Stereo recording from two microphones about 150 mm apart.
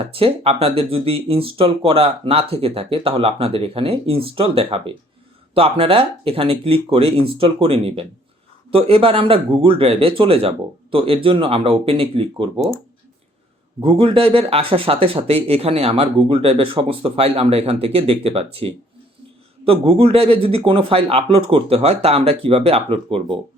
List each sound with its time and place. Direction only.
0.1 s speech: 40° right (ahead or behind)
13.8 s speech: 35° right (ahead or behind)